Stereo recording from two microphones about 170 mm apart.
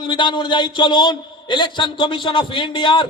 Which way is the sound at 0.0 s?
30° left (ahead or behind).